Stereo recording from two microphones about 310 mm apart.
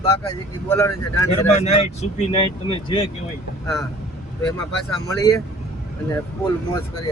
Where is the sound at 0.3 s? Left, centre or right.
Centre.